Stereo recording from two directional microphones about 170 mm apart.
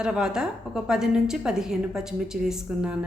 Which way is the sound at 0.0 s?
5° right (ahead or behind).